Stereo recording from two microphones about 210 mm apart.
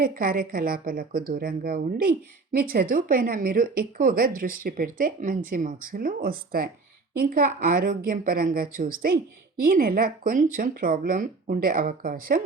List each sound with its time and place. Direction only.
0.0 s a woman's voice: 45° right (ahead or behind)